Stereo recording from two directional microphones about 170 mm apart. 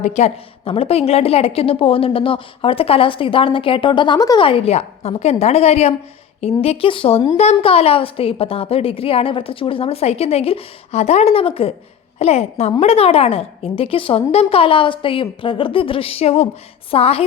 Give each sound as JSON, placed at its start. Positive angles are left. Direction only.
{"t": 0.0, "sound": "a woman's voice", "side_deg": 40}